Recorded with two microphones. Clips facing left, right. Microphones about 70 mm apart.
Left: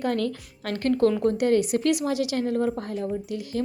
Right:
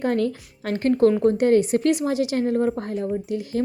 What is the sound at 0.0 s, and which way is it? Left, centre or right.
A woman's voice, right.